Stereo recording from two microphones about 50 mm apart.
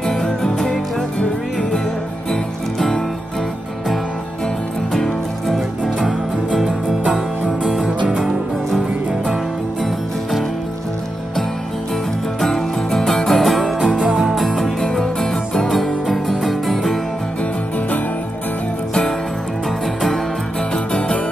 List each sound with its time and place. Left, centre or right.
0.0 s music: centre
2.3 s music: centre
4.9 s music: centre
5.9 s music: centre
9.2 s music: centre
12.4 s music: centre
13.8 s music: centre
14.3 s music: centre
20.7 s music: centre